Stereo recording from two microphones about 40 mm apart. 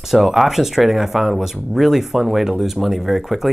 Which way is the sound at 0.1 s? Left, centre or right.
Centre.